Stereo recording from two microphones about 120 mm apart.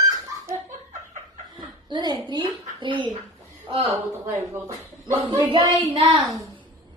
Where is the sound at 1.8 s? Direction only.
40° right (ahead or behind).